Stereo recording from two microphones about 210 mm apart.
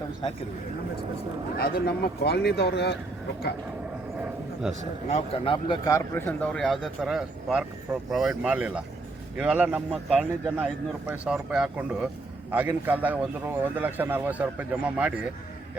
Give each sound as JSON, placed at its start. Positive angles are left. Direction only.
{"t": 1.5, "sound": "speech", "side_deg": 45}
{"t": 5.0, "sound": "a man's voice", "side_deg": 30}